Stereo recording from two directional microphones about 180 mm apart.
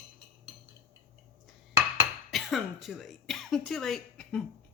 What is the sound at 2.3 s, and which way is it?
Speech, centre (ahead or behind).